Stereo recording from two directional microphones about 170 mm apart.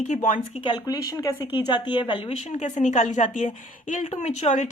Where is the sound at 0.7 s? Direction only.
25° left (ahead or behind).